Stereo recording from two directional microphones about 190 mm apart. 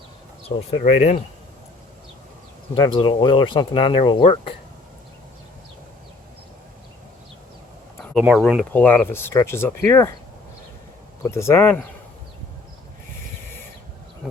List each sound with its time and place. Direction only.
0.4 s speech: 35° left (ahead or behind)
2.7 s speech: 25° left (ahead or behind)
8.1 s speech: centre (ahead or behind)
8.7 s speech: 10° left (ahead or behind)
11.2 s speech: 15° left (ahead or behind)